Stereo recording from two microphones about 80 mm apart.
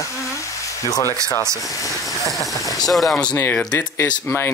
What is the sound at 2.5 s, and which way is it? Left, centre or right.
Vehicle, left.